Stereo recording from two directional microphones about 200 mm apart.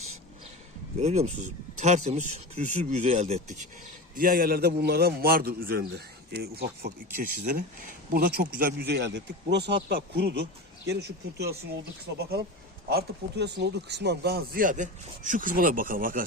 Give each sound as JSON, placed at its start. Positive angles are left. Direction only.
{"t": 0.9, "sound": "speech", "side_deg": -30}
{"t": 4.1, "sound": "speech", "side_deg": -45}
{"t": 12.9, "sound": "speech", "side_deg": -55}